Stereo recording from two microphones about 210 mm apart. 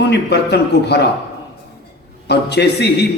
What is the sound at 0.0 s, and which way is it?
A man's voice, 55° left (ahead or behind).